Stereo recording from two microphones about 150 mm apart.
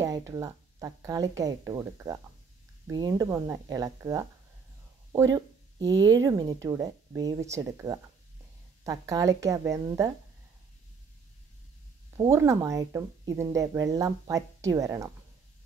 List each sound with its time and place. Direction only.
0.0 s speech: 20° right (ahead or behind)
12.3 s speech: 20° right (ahead or behind)